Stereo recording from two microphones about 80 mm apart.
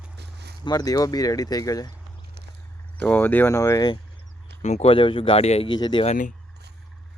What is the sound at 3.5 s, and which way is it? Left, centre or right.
Speech, left.